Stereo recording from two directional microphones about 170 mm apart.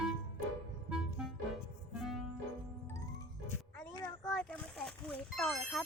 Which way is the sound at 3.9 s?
20° left (ahead or behind).